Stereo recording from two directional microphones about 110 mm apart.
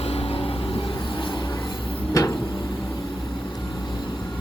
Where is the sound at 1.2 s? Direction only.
50° left (ahead or behind).